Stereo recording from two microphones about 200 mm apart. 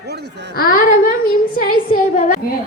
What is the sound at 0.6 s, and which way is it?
A woman's voice, 45° left (ahead or behind).